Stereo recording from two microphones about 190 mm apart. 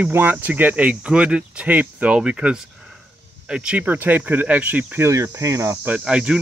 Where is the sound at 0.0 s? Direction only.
10° right (ahead or behind).